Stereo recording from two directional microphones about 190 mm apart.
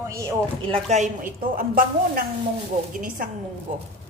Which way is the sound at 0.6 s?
35° right (ahead or behind).